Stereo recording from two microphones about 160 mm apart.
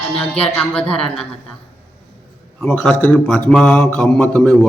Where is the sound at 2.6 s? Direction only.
5° left (ahead or behind).